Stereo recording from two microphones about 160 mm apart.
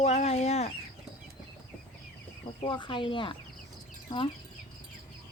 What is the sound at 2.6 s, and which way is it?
Speech, 30° left (ahead or behind).